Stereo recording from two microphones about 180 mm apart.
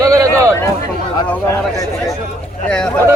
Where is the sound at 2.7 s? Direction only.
5° left (ahead or behind).